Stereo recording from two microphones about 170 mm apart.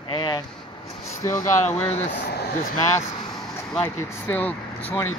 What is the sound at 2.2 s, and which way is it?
Speech, 65° left (ahead or behind).